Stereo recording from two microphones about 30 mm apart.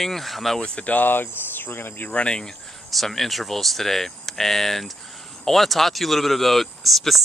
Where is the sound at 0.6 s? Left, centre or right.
Left.